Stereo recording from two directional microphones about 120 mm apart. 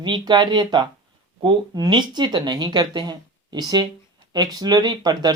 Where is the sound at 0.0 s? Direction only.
40° right (ahead or behind).